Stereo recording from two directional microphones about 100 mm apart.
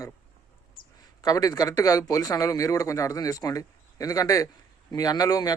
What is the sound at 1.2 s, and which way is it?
Speech, 35° left (ahead or behind).